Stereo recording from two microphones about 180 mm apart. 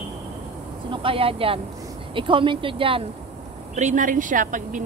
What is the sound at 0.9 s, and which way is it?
Speech, 30° right (ahead or behind).